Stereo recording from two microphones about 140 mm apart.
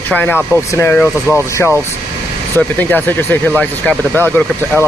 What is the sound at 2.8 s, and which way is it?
Speech, 15° left (ahead or behind).